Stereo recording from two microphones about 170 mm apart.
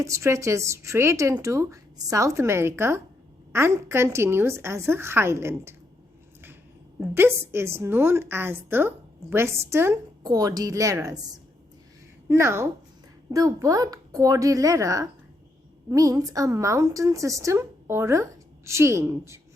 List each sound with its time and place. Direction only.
0.0 s a woman's voice: 15° right (ahead or behind)
7.1 s a woman's voice: 15° right (ahead or behind)
12.3 s a woman's voice: 15° right (ahead or behind)